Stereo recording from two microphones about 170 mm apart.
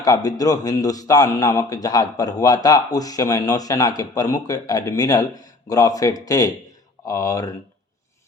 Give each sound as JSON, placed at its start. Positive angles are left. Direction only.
{"t": 0.0, "sound": "a man's voice", "side_deg": 20}